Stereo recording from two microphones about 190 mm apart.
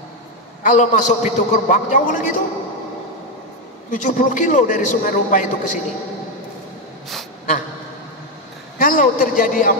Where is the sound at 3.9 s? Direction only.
40° left (ahead or behind).